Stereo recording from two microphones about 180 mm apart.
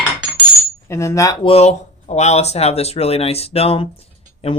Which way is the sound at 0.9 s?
15° left (ahead or behind).